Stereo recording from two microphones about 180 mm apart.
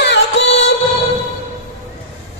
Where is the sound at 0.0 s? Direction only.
75° left (ahead or behind).